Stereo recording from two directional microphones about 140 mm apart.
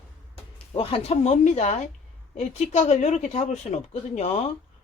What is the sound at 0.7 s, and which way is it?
Speech, 40° left (ahead or behind).